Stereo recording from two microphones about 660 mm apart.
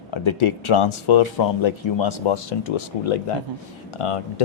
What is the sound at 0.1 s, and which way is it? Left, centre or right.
Speech, left.